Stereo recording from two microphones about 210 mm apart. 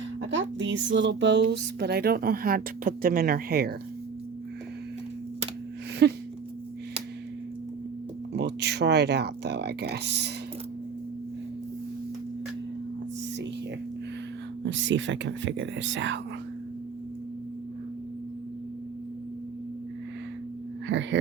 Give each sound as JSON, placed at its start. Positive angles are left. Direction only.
{"t": 0.2, "sound": "speech", "side_deg": -60}
{"t": 6.0, "sound": "speech", "side_deg": -50}
{"t": 8.3, "sound": "speech", "side_deg": -50}
{"t": 14.6, "sound": "speech", "side_deg": -60}
{"t": 20.8, "sound": "speech", "side_deg": -60}